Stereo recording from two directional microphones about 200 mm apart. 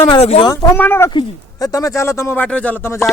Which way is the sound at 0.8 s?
10° left (ahead or behind).